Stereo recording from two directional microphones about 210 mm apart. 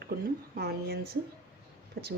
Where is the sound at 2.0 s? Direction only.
45° right (ahead or behind).